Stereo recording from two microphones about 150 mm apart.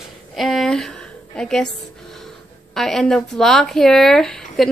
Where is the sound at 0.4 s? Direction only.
Centre (ahead or behind).